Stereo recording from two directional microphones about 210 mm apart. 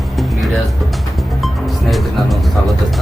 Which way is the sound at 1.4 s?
Centre (ahead or behind).